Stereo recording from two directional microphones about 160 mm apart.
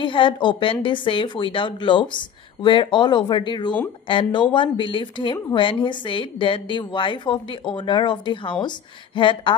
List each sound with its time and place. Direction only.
0.0 s a woman's voice: 30° left (ahead or behind)